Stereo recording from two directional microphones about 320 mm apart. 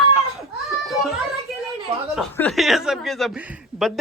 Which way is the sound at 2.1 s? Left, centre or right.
Centre.